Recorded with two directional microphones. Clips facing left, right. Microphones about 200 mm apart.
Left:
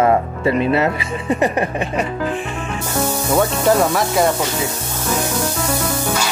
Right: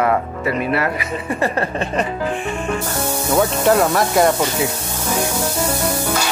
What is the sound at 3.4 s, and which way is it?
Speech, centre (ahead or behind).